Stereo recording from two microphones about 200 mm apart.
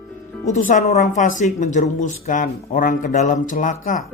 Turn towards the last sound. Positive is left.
turn(degrees=40)  # may be behind; listen again after turning